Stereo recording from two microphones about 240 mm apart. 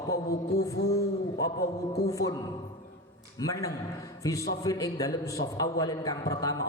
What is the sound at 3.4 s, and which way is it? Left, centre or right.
A man's voice, centre.